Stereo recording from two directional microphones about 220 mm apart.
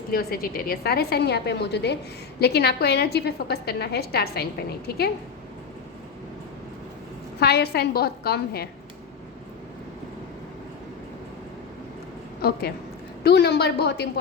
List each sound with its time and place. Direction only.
0.1 s a woman's voice: 45° left (ahead or behind)
7.3 s a woman's voice: 45° left (ahead or behind)
12.4 s a woman's voice: 45° left (ahead or behind)